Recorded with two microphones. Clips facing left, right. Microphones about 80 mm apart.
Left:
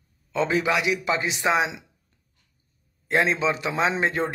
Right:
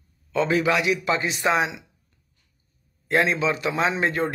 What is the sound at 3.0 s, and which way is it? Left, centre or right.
Speech, left.